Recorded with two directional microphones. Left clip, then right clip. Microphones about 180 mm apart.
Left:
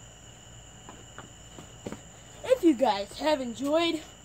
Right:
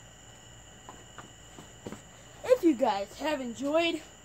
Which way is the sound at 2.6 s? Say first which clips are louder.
Left 2 dB; 5° left (ahead or behind).